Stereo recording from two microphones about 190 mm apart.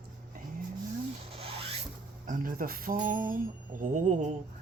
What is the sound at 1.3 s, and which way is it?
Zipper, 30° right (ahead or behind).